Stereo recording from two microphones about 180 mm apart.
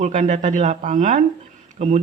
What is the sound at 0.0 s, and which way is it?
Speech, 40° right (ahead or behind).